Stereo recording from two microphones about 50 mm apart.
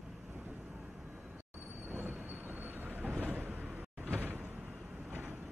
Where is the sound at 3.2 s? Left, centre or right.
Right.